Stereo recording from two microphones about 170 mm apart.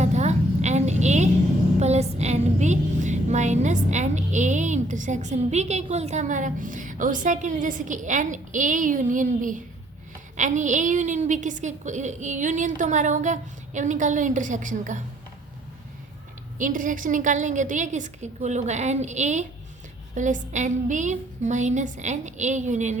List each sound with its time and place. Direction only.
0.0 s a sound: 40° right (ahead or behind)
1.8 s music: 40° right (ahead or behind)
10.3 s a woman's voice: 45° right (ahead or behind)
16.6 s a woman's voice: 50° right (ahead or behind)